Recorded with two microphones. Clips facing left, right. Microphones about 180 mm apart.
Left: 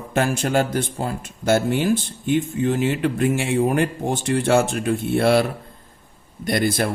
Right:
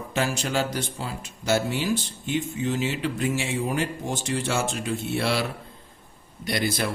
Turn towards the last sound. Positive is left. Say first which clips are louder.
# left 5 dB
turn(degrees=50)  # may be behind; listen again after turning